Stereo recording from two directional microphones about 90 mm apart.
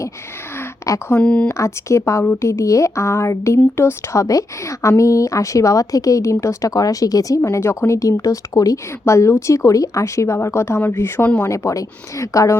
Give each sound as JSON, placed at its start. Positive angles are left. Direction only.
{"t": 1.1, "sound": "speech", "side_deg": 10}
{"t": 1.5, "sound": "speech", "side_deg": 35}